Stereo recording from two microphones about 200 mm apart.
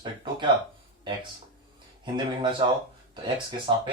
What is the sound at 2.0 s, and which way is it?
Speech, 25° right (ahead or behind).